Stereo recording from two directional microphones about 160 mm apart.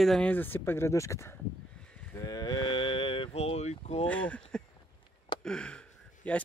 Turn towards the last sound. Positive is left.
turn(degrees=5)  # may be behind; listen again after turning